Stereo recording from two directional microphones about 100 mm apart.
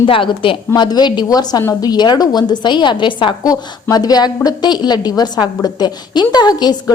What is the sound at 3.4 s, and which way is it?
A woman's voice, 40° left (ahead or behind).